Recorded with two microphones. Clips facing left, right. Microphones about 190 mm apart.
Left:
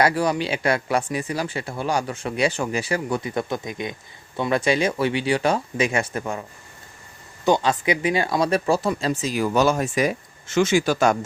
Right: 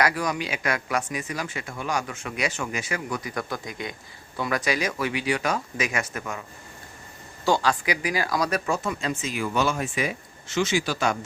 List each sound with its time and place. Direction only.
0.0 s speech: 30° left (ahead or behind)
7.4 s speech: 20° left (ahead or behind); by 11.2 s 45° left (ahead or behind)